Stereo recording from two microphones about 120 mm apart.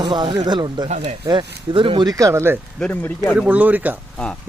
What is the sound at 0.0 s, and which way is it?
Speech, 40° right (ahead or behind).